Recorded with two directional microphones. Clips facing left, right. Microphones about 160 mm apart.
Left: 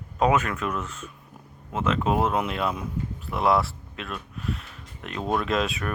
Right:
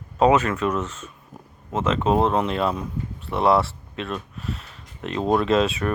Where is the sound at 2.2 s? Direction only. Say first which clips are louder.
Right 4 dB; 5° left (ahead or behind).